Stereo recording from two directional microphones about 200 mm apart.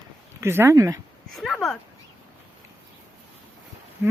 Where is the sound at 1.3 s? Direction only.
Centre (ahead or behind).